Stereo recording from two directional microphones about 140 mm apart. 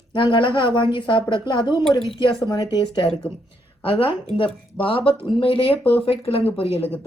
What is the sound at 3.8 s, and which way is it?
A woman's voice, 40° left (ahead or behind).